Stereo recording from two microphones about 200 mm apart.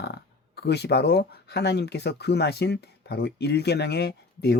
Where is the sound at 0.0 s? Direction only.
55° left (ahead or behind).